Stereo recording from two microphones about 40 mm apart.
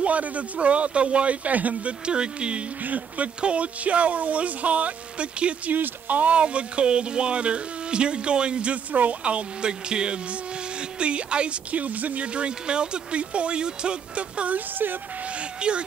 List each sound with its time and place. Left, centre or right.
0.0 s speech: right
2.0 s speech: right
2.8 s speech: right
3.3 s speech: right
5.7 s speech: right
6.3 s speech: right
14.5 s speech: right
15.6 s speech: right